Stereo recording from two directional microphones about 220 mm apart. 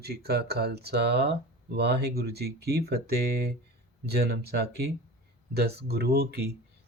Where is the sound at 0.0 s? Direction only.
45° right (ahead or behind).